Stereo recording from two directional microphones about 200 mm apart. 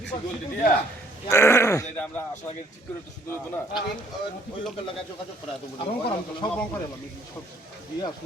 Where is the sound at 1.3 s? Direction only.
15° left (ahead or behind).